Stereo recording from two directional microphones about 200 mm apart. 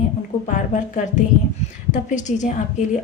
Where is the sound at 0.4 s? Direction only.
40° left (ahead or behind).